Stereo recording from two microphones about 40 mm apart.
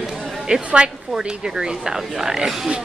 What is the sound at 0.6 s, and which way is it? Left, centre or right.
Speech, right.